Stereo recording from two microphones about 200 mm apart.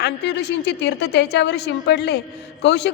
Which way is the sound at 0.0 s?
60° left (ahead or behind).